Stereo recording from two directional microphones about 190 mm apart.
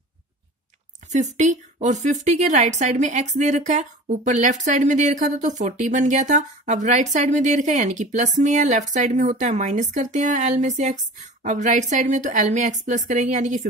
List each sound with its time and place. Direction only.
1.1 s a woman's voice: 40° right (ahead or behind)